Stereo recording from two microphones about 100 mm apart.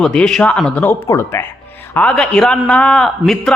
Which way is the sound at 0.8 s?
25° left (ahead or behind).